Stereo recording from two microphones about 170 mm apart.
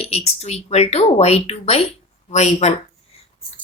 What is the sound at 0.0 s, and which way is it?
A woman's voice, 40° left (ahead or behind).